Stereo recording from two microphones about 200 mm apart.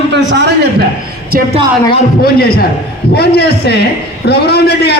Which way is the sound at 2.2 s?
50° left (ahead or behind).